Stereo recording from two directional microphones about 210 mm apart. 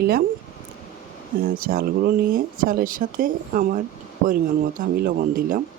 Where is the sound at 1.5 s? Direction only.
45° right (ahead or behind).